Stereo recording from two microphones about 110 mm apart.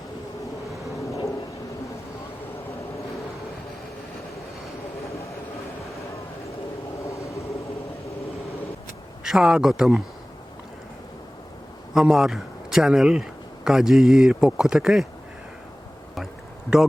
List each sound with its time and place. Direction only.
0.9 s vehicle: 30° left (ahead or behind)
7.1 s vehicle: 30° left (ahead or behind)
9.2 s speech: 5° right (ahead or behind)
11.9 s speech: 5° right (ahead or behind)
16.1 s a sound: 5° right (ahead or behind)